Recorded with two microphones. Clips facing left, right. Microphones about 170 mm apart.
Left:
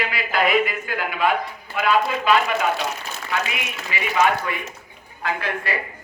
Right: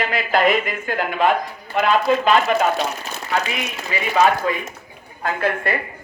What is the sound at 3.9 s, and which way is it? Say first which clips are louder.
Speech: right 3 dB; 40° right (ahead or behind).